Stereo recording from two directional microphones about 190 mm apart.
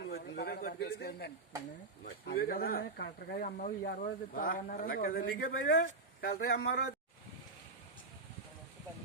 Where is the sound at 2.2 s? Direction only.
50° left (ahead or behind).